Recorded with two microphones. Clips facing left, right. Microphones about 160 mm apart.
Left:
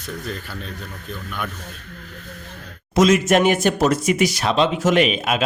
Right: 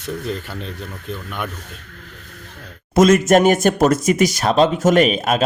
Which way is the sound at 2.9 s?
50° right (ahead or behind).